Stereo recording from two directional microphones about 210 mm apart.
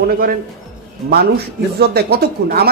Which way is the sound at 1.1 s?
50° right (ahead or behind).